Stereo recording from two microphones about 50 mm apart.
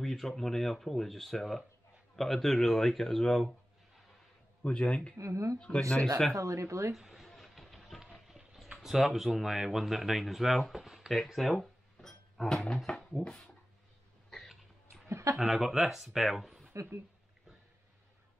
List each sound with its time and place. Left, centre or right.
0.0 s speech: centre
4.6 s speech: left
5.1 s speech: right
5.6 s speech: centre
6.3 s speech: right
7.0 s a sound: centre
8.0 s speech: centre
15.0 s a sound: right
15.3 s speech: centre